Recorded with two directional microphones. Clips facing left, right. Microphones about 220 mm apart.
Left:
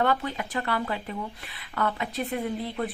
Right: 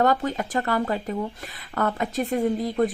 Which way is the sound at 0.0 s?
40° right (ahead or behind).